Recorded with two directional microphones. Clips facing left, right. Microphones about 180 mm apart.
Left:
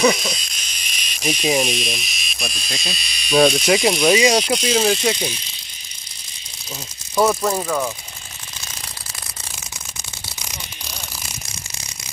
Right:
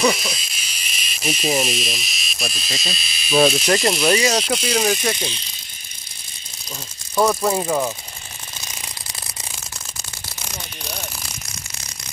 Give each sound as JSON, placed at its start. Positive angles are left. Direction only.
{"t": 0.0, "sound": "speech", "side_deg": 0}
{"t": 4.9, "sound": "speech", "side_deg": 15}
{"t": 7.4, "sound": "speech", "side_deg": -15}